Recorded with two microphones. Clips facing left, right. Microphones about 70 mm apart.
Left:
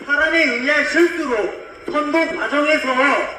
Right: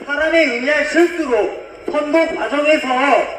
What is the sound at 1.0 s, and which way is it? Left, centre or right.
Speech, left.